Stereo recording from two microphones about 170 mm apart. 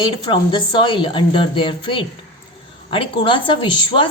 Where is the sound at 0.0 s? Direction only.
30° left (ahead or behind).